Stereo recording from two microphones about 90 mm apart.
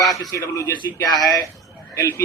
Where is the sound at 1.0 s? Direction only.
45° left (ahead or behind).